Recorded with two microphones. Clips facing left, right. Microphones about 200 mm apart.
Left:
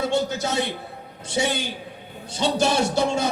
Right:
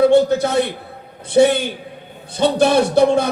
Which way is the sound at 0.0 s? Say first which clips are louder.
Right 11 dB; 55° right (ahead or behind).